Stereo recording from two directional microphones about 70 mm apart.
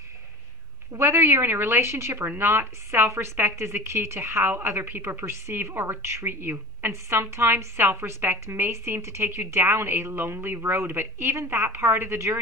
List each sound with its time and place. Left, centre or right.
0.9 s speech: right